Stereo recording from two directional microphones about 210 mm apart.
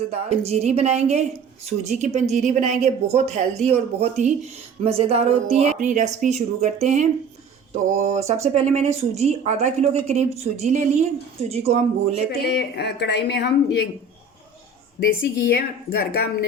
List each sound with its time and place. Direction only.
0.1 s speech: 30° right (ahead or behind)
12.5 s a woman's voice: 50° left (ahead or behind)
15.2 s a woman's voice: 45° left (ahead or behind)